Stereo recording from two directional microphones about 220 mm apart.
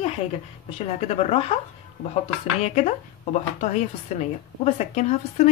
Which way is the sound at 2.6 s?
30° left (ahead or behind).